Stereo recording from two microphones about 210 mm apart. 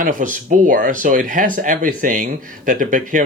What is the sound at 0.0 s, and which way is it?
Speech, 40° right (ahead or behind).